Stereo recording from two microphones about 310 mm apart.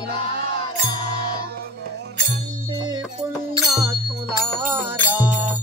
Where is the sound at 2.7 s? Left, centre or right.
Centre.